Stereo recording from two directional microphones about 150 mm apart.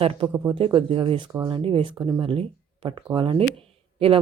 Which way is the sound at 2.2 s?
35° right (ahead or behind).